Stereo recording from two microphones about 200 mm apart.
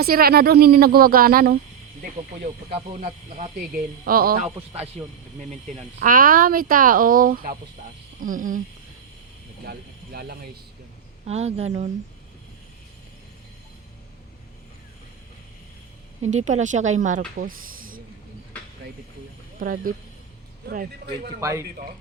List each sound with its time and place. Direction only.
0.0 s speech: 50° right (ahead or behind)
2.7 s speech: 30° right (ahead or behind)
4.0 s speech: 45° right (ahead or behind)
5.0 s speech: 30° right (ahead or behind)
9.6 s speech: 50° right (ahead or behind)
11.3 s speech: 30° right (ahead or behind)
16.3 s speech: 35° right (ahead or behind)
19.5 s speech: 45° right (ahead or behind)